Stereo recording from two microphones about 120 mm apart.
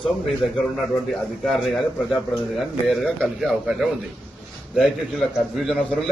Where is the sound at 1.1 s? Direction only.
Centre (ahead or behind).